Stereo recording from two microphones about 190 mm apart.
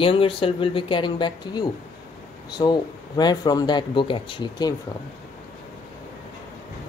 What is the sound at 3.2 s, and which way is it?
Speech, 20° left (ahead or behind).